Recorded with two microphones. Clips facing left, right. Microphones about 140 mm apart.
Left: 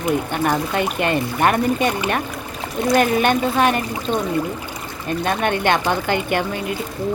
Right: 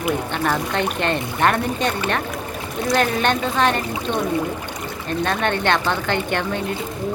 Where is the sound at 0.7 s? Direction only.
10° left (ahead or behind).